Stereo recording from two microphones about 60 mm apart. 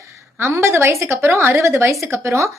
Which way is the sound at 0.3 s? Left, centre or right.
Right.